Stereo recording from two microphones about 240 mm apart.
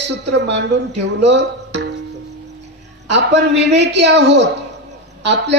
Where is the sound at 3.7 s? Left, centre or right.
Right.